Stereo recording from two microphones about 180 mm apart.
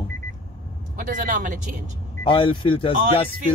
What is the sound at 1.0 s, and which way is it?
Speech, 50° right (ahead or behind).